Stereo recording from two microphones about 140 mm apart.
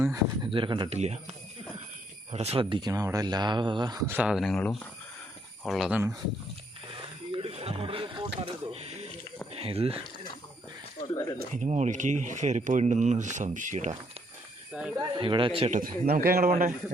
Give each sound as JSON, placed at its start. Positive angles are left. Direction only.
{"t": 0.4, "sound": "speech", "side_deg": -35}
{"t": 0.9, "sound": "speech", "side_deg": -50}
{"t": 2.3, "sound": "speech", "side_deg": -50}
{"t": 4.0, "sound": "speech", "side_deg": -15}
{"t": 4.3, "sound": "speech", "side_deg": 0}
{"t": 7.3, "sound": "a sound", "side_deg": -40}
{"t": 8.7, "sound": "a sound", "side_deg": -50}
{"t": 9.6, "sound": "speech", "side_deg": -45}
{"t": 11.1, "sound": "speech", "side_deg": 25}
{"t": 11.3, "sound": "speech", "side_deg": -60}
{"t": 14.7, "sound": "speech", "side_deg": -10}
{"t": 14.9, "sound": "speech", "side_deg": -35}
{"t": 15.7, "sound": "a man's voice", "side_deg": -80}